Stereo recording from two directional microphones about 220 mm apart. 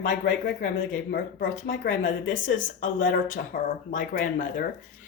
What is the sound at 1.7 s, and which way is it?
Speech, 55° left (ahead or behind).